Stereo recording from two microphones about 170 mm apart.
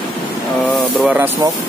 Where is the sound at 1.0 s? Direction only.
10° right (ahead or behind).